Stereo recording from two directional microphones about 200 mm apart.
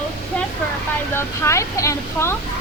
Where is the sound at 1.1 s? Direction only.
15° left (ahead or behind).